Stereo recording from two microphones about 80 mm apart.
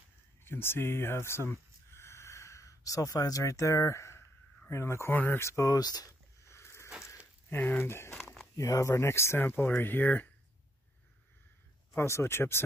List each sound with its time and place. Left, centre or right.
0.5 s speech: left
6.4 s boat: left
7.4 s speech: left
12.0 s speech: left